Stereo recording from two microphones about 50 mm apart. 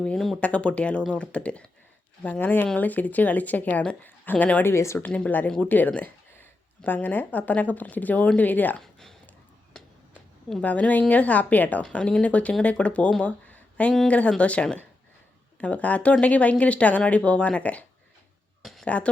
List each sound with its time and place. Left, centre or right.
0.3 s a woman's voice: left
2.2 s speech: left
4.6 s speech: left
4.9 s a woman's voice: left
8.8 s a sound: centre
10.6 s a woman's voice: left
11.8 s a woman's voice: left
13.5 s a sound: left
14.1 s a woman's voice: left
18.6 s a sound: centre